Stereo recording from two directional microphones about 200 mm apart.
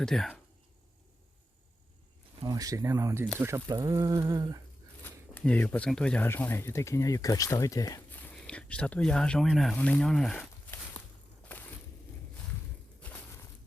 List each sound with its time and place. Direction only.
0.0 s speech: 5° left (ahead or behind)
2.4 s speech: 20° right (ahead or behind)
5.0 s speech: 10° left (ahead or behind)
11.5 s crushing: 5° left (ahead or behind)
13.0 s a sound: 10° left (ahead or behind)